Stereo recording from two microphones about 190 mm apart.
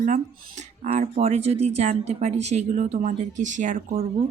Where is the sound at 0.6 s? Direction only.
35° right (ahead or behind).